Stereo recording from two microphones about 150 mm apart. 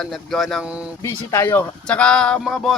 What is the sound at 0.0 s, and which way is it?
Speech, centre (ahead or behind).